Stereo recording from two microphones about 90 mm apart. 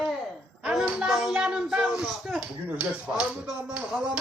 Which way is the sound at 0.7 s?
10° right (ahead or behind).